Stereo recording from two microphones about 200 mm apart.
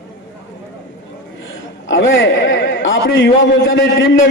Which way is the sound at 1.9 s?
70° left (ahead or behind).